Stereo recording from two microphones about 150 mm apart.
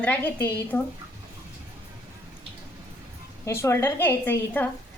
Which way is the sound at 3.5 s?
15° left (ahead or behind).